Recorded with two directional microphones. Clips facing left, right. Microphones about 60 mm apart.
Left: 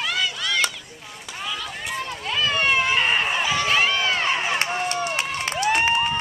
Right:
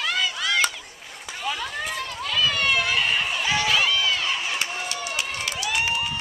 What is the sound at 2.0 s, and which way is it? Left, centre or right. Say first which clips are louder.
Run: left 1 dB; left.